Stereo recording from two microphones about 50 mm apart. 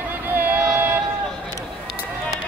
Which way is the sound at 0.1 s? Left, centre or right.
Right.